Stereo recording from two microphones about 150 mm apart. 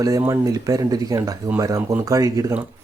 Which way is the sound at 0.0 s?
25° right (ahead or behind).